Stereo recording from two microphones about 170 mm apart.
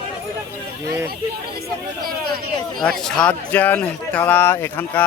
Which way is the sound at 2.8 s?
5° left (ahead or behind).